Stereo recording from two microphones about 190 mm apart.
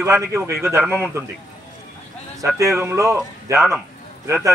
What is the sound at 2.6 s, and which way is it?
A man's voice, 15° right (ahead or behind).